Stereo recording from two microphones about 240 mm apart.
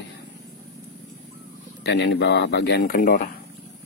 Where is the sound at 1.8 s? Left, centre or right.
Left.